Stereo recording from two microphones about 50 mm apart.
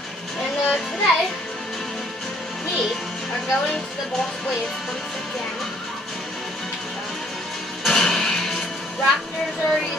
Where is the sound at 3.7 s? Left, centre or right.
Centre.